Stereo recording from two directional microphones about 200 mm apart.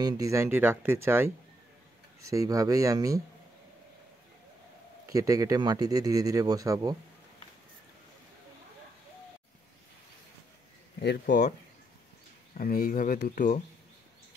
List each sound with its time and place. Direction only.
0.0 s speech: 15° right (ahead or behind)
5.0 s speech: 15° right (ahead or behind)
11.0 s speech: 50° left (ahead or behind)
12.5 s speech: 45° left (ahead or behind)